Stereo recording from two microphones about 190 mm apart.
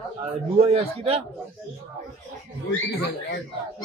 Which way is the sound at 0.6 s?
30° right (ahead or behind).